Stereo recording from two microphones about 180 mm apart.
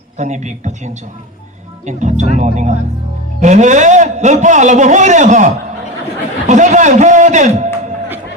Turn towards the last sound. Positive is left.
turn(degrees=-40)  # may be behind; listen again after turning